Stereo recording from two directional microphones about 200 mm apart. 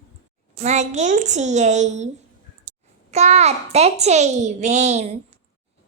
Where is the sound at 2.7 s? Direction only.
40° right (ahead or behind).